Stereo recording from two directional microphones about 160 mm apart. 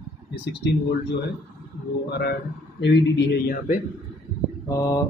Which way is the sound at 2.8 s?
90° left.